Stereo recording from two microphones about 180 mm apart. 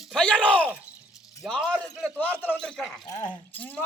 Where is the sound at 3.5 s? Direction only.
10° left (ahead or behind).